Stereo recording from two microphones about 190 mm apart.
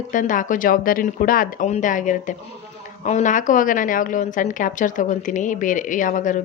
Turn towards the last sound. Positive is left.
turn(degrees=45)  # may be behind; listen again after turning